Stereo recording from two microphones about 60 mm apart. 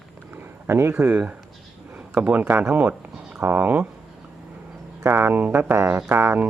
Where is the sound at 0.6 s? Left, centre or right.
Right.